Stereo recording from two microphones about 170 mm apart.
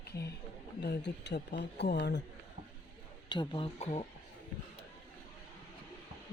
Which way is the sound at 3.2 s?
25° left (ahead or behind).